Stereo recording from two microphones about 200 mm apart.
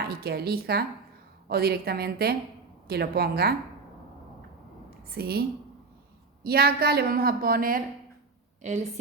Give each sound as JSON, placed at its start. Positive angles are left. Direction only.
{"t": 0.0, "sound": "a woman's voice", "side_deg": -50}
{"t": 5.0, "sound": "a woman's voice", "side_deg": -50}
{"t": 6.4, "sound": "a woman's voice", "side_deg": -50}
{"t": 8.6, "sound": "a woman's voice", "side_deg": -35}